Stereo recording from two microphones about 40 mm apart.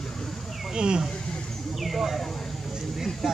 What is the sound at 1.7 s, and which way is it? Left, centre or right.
Bird, centre.